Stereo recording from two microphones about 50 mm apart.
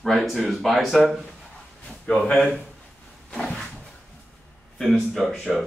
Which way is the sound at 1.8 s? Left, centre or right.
Left.